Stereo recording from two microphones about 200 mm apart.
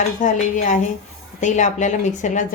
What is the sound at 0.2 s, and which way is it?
A woman's voice, 40° left (ahead or behind).